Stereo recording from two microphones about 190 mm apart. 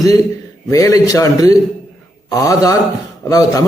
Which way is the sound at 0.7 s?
15° left (ahead or behind).